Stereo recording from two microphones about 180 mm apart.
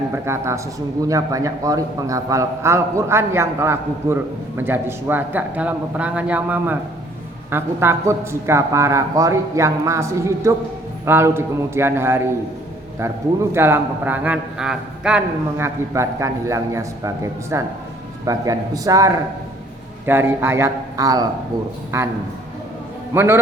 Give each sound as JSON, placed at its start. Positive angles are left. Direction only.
{"t": 0.1, "sound": "a man's voice", "side_deg": -15}
{"t": 23.1, "sound": "a man's voice", "side_deg": -15}